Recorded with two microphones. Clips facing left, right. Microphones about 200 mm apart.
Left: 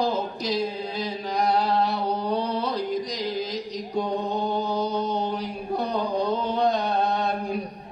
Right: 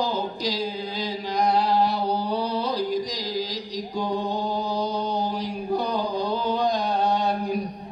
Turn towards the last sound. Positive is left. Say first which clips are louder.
# right 2 dB
turn(degrees=-35)  # may be behind; listen again after turning